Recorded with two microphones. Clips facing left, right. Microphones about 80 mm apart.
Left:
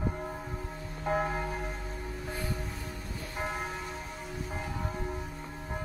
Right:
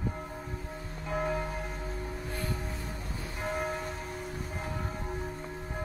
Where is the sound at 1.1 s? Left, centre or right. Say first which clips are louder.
Left 2 dB; left.